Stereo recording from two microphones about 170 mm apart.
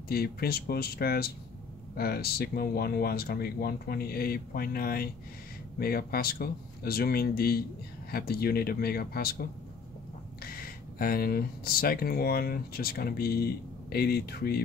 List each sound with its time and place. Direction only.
0.1 s speech: 65° left (ahead or behind)